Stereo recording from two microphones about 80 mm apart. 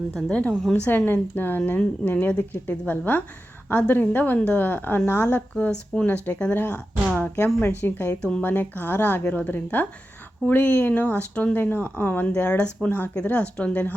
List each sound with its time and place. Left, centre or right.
0.1 s a woman's voice: centre
0.9 s a woman's voice: left
5.5 s a woman's voice: centre
8.2 s speech: centre
8.4 s a woman's voice: left